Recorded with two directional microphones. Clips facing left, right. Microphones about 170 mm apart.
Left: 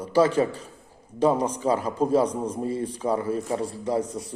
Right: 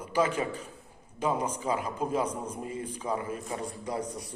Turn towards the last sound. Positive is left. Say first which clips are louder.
# left 8 dB
turn(degrees=25)  # may be behind; listen again after turning